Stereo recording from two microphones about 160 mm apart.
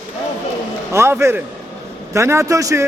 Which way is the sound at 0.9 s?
15° right (ahead or behind).